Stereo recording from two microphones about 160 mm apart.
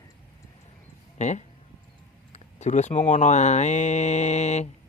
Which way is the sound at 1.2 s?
45° left (ahead or behind).